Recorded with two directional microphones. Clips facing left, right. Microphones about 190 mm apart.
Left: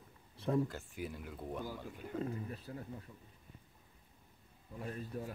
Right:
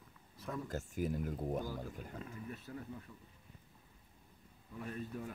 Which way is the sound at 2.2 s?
35° left (ahead or behind).